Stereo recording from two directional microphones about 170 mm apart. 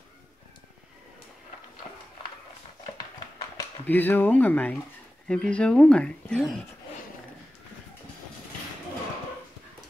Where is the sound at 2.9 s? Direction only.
25° left (ahead or behind).